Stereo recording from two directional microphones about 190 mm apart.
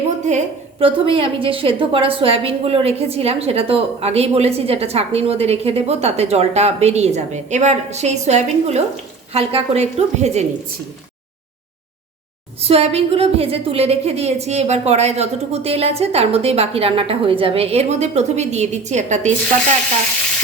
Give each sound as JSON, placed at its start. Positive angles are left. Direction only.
{"t": 0.3, "sound": "a woman's voice", "side_deg": -35}
{"t": 12.6, "sound": "a woman's voice", "side_deg": -30}